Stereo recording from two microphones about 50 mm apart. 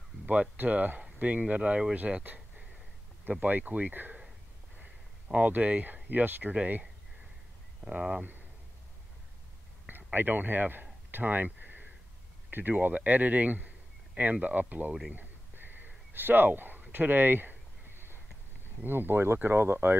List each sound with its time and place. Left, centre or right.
0.3 s speech: right
3.3 s speech: right
5.3 s speech: right
7.8 s speech: right
9.8 s a sound: right
12.4 s a man's voice: right
15.1 s a sound: right
18.9 s speech: right